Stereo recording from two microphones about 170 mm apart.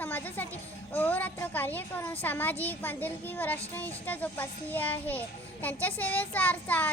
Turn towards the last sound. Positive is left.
turn(degrees=10)  # may be behind; listen again after turning